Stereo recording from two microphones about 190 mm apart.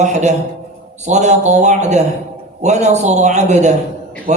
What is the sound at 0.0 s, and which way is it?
Mantra, 40° right (ahead or behind).